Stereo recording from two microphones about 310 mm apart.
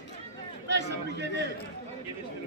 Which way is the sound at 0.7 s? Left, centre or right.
Right.